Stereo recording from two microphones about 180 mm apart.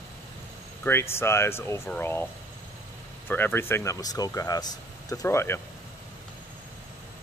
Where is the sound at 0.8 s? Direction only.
15° left (ahead or behind).